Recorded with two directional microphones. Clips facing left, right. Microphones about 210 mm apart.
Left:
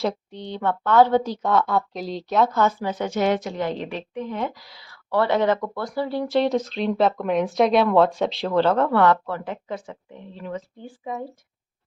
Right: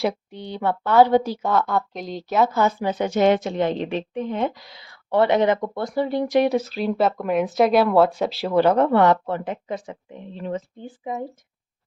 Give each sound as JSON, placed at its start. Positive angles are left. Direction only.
{"t": 0.0, "sound": "a woman's voice", "side_deg": -10}